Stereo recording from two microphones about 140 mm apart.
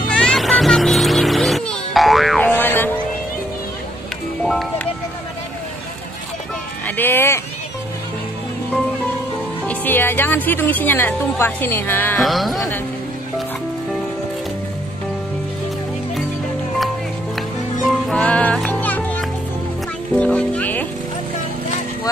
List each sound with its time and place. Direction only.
0.1 s music: 5° left (ahead or behind)
2.4 s music: 15° left (ahead or behind)
4.4 s music: centre (ahead or behind)
7.0 s speech: 15° left (ahead or behind)
9.7 s speech: 15° left (ahead or behind)
12.2 s speech: centre (ahead or behind)
18.0 s music: 10° left (ahead or behind)
20.2 s speech: 10° left (ahead or behind)